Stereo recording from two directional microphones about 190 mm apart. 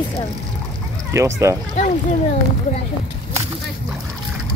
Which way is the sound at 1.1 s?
15° right (ahead or behind).